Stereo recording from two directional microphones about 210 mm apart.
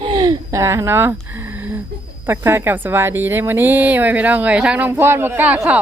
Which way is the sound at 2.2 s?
10° right (ahead or behind).